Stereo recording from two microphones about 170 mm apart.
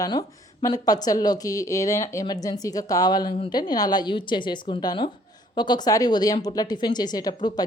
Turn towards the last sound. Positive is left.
turn(degrees=25)  # may be behind; listen again after turning